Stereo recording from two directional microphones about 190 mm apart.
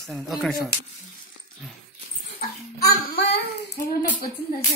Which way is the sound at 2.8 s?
55° left (ahead or behind).